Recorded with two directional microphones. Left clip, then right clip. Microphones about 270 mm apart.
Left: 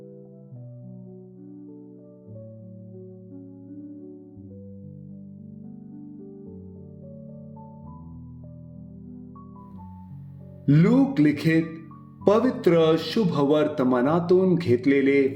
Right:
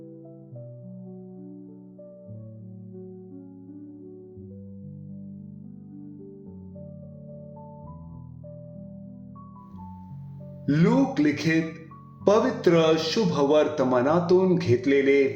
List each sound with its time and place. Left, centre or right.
10.7 s a man's voice: left